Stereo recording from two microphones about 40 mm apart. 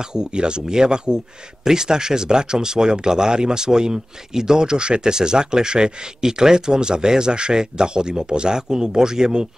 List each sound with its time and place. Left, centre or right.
0.1 s speech: right